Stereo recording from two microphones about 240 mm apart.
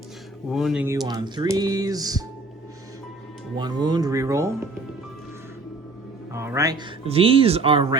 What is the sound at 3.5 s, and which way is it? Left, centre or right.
Speech, centre.